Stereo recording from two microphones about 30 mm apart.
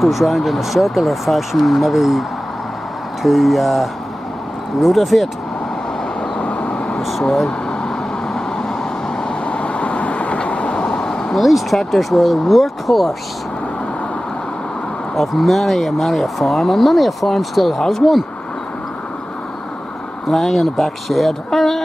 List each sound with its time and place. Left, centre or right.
0.0 s speech: centre
6.4 s vehicle: left
7.0 s speech: centre
8.4 s vehicle: centre
9.3 s vehicle: left
11.0 s vehicle: left
11.3 s speech: centre
15.1 s speech: centre
20.2 s speech: centre